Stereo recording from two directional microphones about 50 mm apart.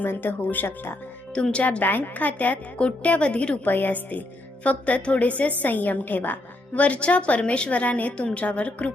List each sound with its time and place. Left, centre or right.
0.0 s speech: left
1.3 s a woman's voice: left
1.6 s a woman's voice: left
3.7 s a woman's voice: left